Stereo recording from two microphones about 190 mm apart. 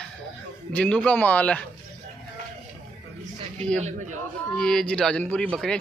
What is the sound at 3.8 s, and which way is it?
Speech, 40° right (ahead or behind).